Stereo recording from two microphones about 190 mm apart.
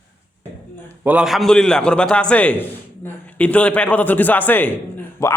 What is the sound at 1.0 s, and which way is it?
A man's voice, 5° right (ahead or behind).